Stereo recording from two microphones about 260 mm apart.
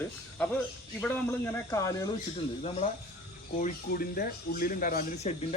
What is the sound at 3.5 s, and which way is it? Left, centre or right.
Speech, left.